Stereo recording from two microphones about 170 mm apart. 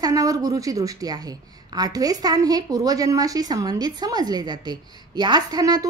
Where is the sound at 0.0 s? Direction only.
20° right (ahead or behind).